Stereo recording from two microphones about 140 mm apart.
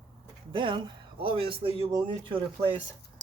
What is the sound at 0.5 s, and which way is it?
Speech, 35° right (ahead or behind).